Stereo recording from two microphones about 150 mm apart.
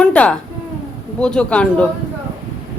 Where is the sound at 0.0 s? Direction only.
10° left (ahead or behind).